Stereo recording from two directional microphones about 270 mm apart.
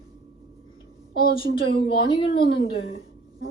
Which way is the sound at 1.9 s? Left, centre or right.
Centre.